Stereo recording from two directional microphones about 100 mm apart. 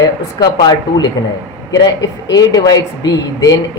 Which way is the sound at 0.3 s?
45° left (ahead or behind).